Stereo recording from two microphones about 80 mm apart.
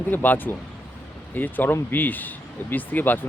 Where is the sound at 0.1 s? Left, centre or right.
Left.